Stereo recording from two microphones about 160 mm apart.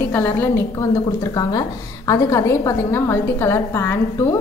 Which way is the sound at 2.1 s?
20° left (ahead or behind).